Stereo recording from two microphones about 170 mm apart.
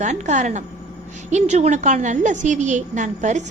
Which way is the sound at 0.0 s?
45° right (ahead or behind).